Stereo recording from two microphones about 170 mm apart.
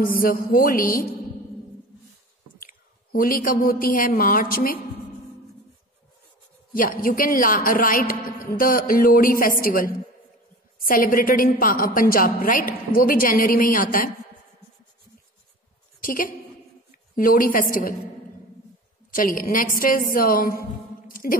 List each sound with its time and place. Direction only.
0.0 s a man's voice: 60° left (ahead or behind)
2.6 s a woman's voice: 60° left (ahead or behind)
6.7 s a man's voice: 55° left (ahead or behind)
16.0 s a woman's voice: 55° left (ahead or behind)
19.0 s a man's voice: 55° left (ahead or behind)